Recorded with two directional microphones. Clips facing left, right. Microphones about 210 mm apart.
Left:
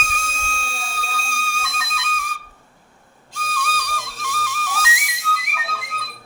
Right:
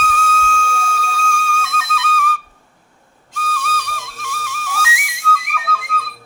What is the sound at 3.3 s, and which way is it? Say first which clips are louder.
Flute: right 3 dB; 15° left (ahead or behind).